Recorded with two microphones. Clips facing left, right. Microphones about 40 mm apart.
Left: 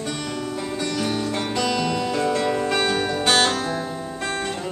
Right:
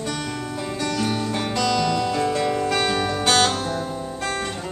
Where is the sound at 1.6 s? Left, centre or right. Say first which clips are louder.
Right 3 dB; centre.